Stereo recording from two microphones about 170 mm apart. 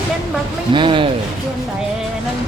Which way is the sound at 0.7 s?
30° right (ahead or behind).